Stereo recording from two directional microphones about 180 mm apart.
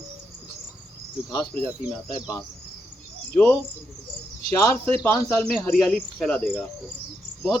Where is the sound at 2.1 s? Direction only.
15° left (ahead or behind).